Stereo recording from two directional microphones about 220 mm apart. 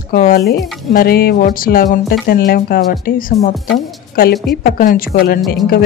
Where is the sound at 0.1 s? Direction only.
40° left (ahead or behind).